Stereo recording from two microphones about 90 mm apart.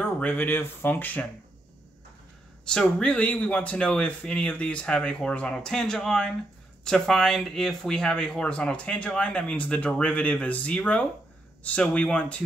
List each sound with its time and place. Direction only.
0.0 s speech: 20° left (ahead or behind)
2.6 s speech: 10° left (ahead or behind)